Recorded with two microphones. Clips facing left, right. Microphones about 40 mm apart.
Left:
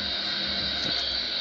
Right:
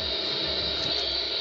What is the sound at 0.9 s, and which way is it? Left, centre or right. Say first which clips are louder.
Hair dryer: right 1 dB; right.